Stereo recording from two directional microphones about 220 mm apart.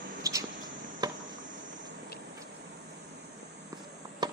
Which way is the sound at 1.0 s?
20° right (ahead or behind).